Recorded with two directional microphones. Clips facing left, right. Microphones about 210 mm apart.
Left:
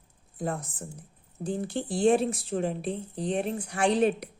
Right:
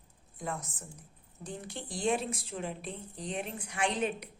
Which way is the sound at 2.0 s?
45° left (ahead or behind).